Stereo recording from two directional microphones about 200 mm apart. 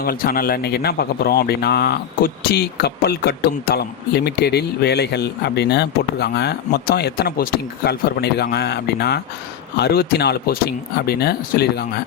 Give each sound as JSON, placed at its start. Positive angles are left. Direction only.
{"t": 0.0, "sound": "a man's voice", "side_deg": 50}